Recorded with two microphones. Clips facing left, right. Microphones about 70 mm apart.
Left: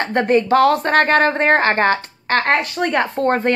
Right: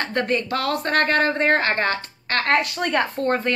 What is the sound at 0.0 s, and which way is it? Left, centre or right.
Speech, left.